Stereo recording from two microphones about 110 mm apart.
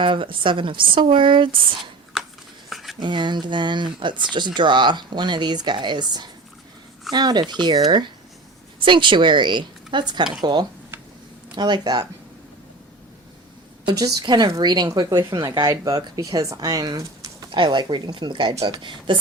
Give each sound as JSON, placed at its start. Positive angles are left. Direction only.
{"t": 0.0, "sound": "speech", "side_deg": -50}
{"t": 2.1, "sound": "shuffling cards", "side_deg": 0}
{"t": 2.6, "sound": "a sound", "side_deg": 0}
{"t": 3.0, "sound": "speech", "side_deg": -45}
{"t": 13.8, "sound": "speech", "side_deg": -35}